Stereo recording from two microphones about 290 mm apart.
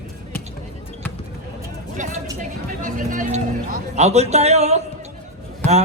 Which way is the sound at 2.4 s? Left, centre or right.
Right.